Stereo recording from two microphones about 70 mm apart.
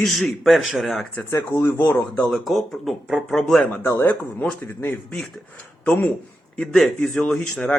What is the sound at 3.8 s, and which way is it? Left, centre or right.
Speech, left.